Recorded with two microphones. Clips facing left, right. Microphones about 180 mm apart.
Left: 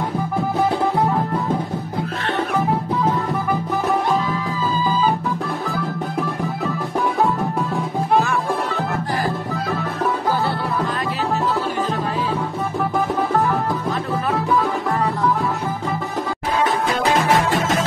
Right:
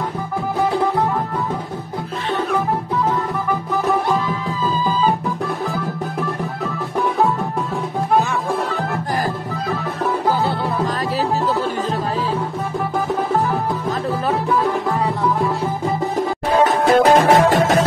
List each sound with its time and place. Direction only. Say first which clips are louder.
16.9 s music: right 8 dB; 45° right (ahead or behind)